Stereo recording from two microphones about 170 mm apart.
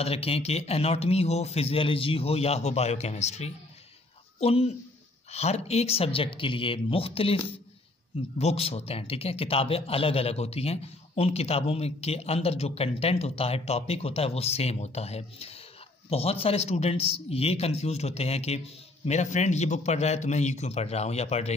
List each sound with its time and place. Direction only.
0.0 s a man's voice: 35° left (ahead or behind)